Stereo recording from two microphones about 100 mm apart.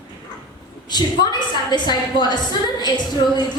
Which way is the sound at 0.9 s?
45° left (ahead or behind).